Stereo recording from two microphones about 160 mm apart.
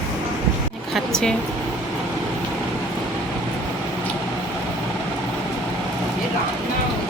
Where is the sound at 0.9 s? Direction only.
5° left (ahead or behind).